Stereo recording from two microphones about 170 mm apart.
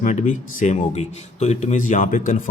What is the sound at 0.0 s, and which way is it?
A man's voice, 45° left (ahead or behind).